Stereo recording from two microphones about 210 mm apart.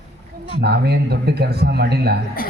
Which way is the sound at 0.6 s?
50° right (ahead or behind).